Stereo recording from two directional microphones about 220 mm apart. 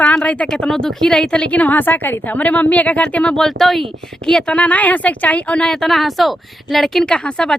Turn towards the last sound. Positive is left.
turn(degrees=5)  # may be behind; listen again after turning